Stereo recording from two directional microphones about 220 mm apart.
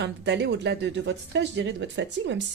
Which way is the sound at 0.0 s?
50° right (ahead or behind).